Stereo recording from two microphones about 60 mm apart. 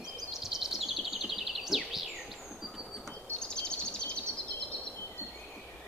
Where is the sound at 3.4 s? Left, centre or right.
Centre.